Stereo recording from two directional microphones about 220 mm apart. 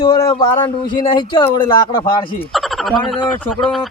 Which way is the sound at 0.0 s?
20° left (ahead or behind).